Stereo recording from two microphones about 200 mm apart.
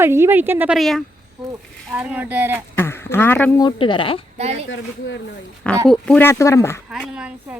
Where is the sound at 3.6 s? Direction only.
20° left (ahead or behind).